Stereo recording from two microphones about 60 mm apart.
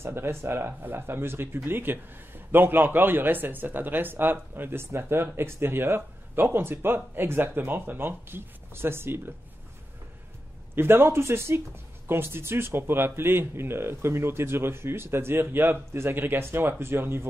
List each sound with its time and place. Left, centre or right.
0.0 s speech: right
10.8 s speech: right